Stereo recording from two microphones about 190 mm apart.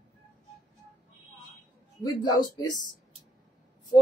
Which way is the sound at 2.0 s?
20° left (ahead or behind).